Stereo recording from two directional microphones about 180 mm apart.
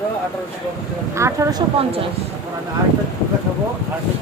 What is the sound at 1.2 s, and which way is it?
Speech, 15° right (ahead or behind).